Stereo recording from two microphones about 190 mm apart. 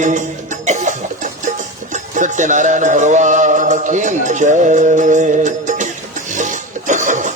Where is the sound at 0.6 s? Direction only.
40° right (ahead or behind).